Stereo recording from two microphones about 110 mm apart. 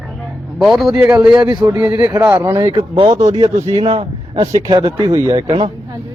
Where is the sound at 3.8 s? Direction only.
60° right (ahead or behind).